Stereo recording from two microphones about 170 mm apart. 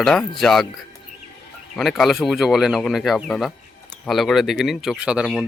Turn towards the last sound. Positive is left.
turn(degrees=-5)  # may be behind; listen again after turning